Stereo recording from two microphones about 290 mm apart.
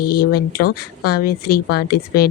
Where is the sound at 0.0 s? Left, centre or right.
Left.